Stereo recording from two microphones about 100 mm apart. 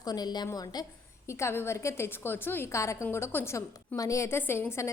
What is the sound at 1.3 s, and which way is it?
A woman's voice, 25° left (ahead or behind).